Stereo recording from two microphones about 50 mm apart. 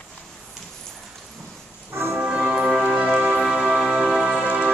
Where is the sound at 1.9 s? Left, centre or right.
Right.